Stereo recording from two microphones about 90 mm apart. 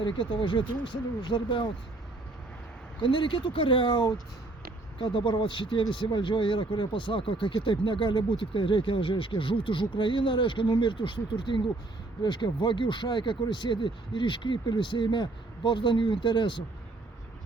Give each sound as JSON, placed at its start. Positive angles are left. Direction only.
{"t": 0.0, "sound": "speech", "side_deg": 65}
{"t": 3.0, "sound": "speech", "side_deg": 65}